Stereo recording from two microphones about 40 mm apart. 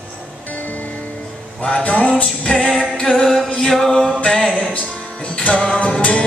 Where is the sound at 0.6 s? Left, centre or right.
Left.